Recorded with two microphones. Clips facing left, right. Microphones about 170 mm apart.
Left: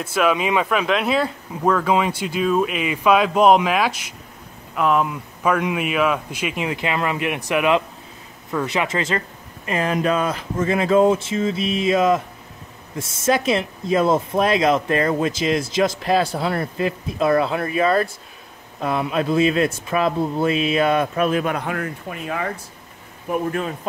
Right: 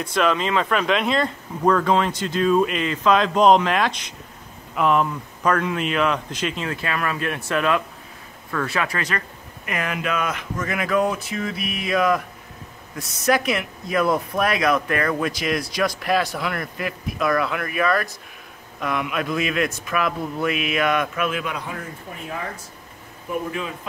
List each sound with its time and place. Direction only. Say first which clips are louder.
0.0 s speech: left 2 dB; 5° left (ahead or behind); by 21.5 s 40° left (ahead or behind)
21.5 s speech: left 6 dB; 70° left (ahead or behind)
23.5 s speech: left 4 dB; 45° left (ahead or behind)